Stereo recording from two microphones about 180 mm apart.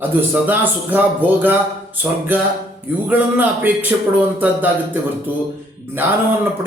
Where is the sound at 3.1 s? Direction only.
10° right (ahead or behind).